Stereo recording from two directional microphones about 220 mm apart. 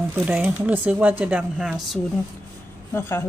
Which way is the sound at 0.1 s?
5° right (ahead or behind).